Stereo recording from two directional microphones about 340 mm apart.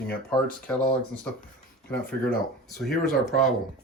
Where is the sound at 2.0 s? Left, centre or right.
Left.